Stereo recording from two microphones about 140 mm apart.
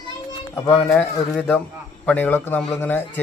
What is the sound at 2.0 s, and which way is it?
Speech, 10° left (ahead or behind).